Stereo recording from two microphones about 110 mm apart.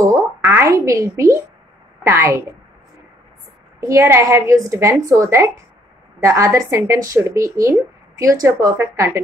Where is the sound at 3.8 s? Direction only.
25° right (ahead or behind).